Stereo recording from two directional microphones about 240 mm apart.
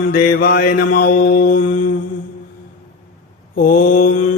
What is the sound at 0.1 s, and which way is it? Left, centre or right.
Mantra, left.